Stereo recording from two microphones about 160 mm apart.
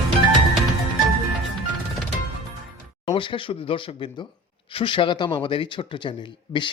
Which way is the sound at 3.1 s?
35° left (ahead or behind).